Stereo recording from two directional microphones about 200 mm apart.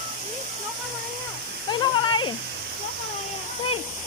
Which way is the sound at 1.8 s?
20° left (ahead or behind).